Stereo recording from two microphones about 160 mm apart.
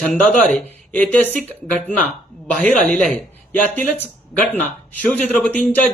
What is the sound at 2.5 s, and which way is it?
Speech, 10° left (ahead or behind).